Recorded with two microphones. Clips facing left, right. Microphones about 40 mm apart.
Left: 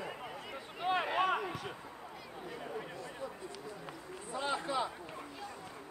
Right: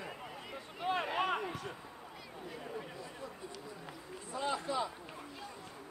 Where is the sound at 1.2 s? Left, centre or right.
Centre.